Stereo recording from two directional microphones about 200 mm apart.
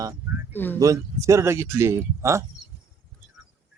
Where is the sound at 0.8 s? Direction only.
15° right (ahead or behind).